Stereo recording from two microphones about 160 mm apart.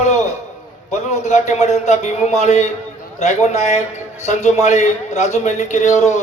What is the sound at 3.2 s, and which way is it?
A man's voice, 45° left (ahead or behind).